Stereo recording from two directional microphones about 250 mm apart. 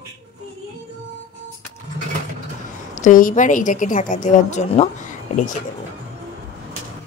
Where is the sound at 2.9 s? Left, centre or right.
Left.